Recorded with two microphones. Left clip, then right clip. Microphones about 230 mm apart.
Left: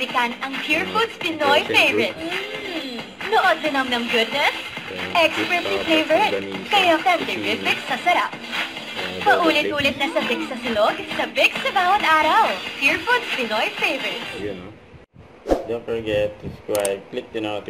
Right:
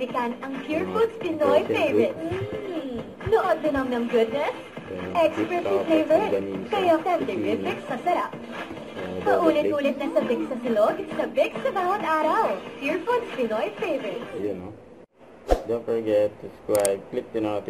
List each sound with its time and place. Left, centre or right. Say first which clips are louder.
0.0 s speech: left 6 dB; centre
15.5 s a sound: left 3 dB; centre
16.7 s speech: even; centre